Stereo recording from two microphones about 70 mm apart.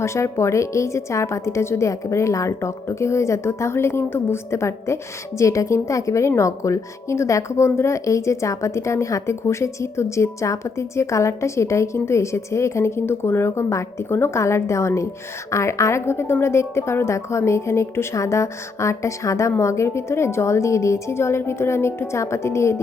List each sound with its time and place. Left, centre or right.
0.0 s a woman's voice: left